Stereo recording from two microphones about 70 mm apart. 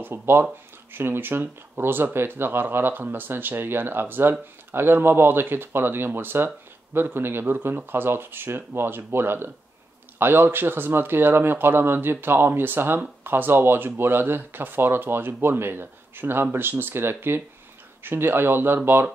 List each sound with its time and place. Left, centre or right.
0.0 s speech: right